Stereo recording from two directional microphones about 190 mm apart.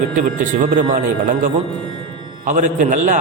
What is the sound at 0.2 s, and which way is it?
Speech, 45° right (ahead or behind).